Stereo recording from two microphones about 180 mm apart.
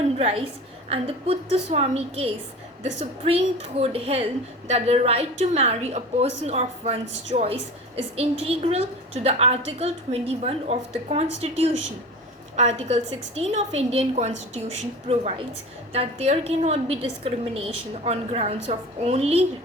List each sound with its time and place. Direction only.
0.2 s a woman's voice: 35° right (ahead or behind)